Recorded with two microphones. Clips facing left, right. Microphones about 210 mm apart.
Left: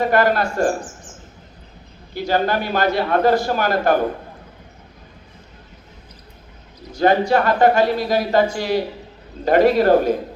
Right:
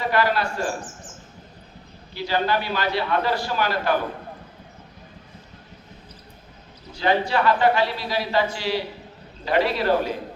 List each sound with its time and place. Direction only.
0.0 s a man's voice: 45° left (ahead or behind)
2.1 s a man's voice: 45° left (ahead or behind)
6.9 s a man's voice: 45° left (ahead or behind)